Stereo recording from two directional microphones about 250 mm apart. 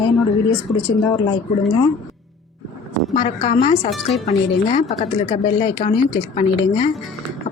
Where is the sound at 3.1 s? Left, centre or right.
Left.